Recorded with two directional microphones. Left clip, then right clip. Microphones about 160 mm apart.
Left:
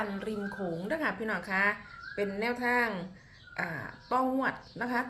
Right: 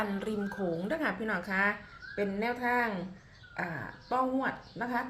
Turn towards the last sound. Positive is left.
turn(degrees=5)  # may be behind; listen again after turning